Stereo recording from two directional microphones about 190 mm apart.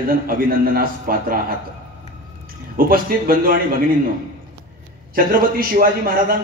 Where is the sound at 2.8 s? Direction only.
50° right (ahead or behind).